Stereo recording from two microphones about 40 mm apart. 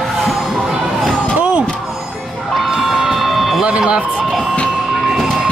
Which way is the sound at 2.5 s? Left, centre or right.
Centre.